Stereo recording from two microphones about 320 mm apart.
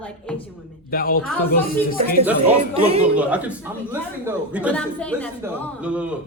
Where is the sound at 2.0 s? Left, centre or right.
Right.